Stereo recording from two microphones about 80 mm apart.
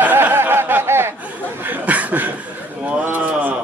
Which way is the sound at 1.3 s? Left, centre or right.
Right.